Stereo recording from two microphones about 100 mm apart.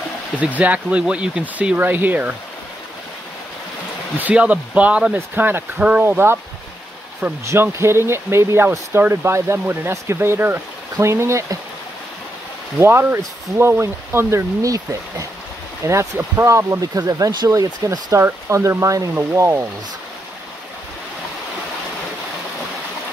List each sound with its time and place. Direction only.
0.4 s speech: 15° right (ahead or behind)
4.2 s speech: 15° right (ahead or behind)
7.4 s speech: 25° right (ahead or behind)
12.7 s speech: 25° right (ahead or behind)